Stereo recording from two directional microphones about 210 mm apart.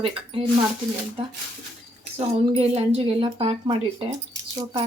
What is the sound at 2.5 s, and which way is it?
A woman's voice, 25° right (ahead or behind).